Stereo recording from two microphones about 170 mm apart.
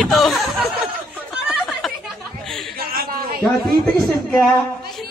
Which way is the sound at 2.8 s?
60° right (ahead or behind).